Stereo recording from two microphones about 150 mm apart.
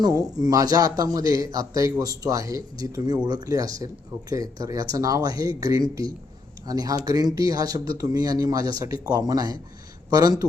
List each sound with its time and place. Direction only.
0.0 s a man's voice: 25° right (ahead or behind)